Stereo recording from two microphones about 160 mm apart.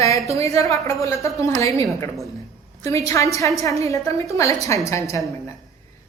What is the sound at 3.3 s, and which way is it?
A woman's voice, 20° left (ahead or behind).